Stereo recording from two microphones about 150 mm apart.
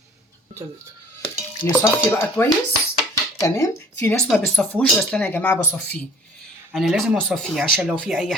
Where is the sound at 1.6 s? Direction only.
15° left (ahead or behind).